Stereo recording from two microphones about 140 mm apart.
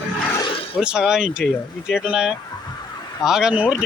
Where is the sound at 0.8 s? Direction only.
5° right (ahead or behind).